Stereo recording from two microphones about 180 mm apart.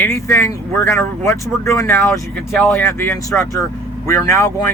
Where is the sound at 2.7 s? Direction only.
15° left (ahead or behind).